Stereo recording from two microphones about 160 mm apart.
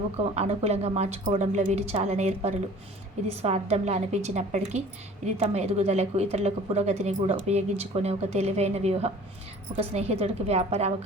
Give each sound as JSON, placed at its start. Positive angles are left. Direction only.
{"t": 0.3, "sound": "a woman's voice", "side_deg": -40}